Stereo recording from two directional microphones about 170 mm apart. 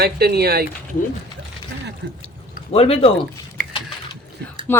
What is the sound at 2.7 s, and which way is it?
Speech, 35° left (ahead or behind).